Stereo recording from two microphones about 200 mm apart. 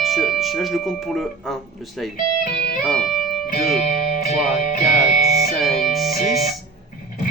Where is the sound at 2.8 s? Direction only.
Centre (ahead or behind).